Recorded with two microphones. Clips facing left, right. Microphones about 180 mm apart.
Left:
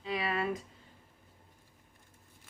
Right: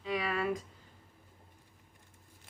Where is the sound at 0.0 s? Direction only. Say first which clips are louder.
Even; 25° left (ahead or behind).